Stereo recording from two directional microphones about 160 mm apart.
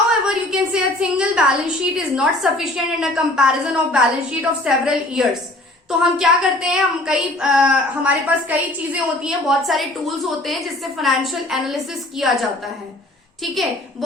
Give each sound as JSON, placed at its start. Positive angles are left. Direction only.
{"t": 0.5, "sound": "a woman's voice", "side_deg": -5}